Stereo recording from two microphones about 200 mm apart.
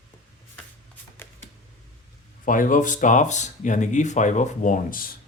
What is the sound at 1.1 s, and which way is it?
Camera, 10° left (ahead or behind).